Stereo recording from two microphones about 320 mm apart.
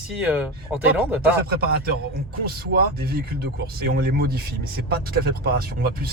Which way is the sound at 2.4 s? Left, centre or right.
Right.